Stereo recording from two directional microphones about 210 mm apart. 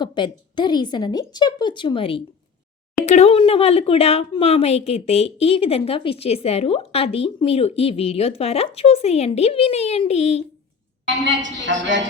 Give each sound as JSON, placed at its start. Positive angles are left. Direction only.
{"t": 0.0, "sound": "a woman's voice", "side_deg": 20}
{"t": 11.4, "sound": "a woman's voice", "side_deg": -60}